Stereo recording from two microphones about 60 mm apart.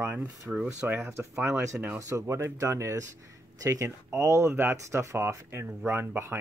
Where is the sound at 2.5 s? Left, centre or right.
Right.